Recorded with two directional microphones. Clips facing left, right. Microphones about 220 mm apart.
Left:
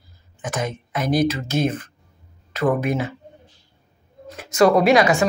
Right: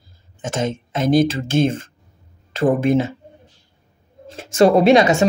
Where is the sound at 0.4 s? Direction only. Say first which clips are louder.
Right 4 dB; 25° right (ahead or behind).